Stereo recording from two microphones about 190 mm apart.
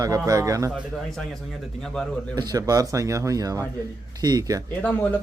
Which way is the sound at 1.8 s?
5° left (ahead or behind).